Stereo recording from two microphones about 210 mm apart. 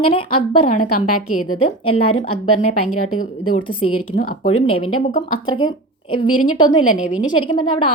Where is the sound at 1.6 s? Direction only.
25° left (ahead or behind).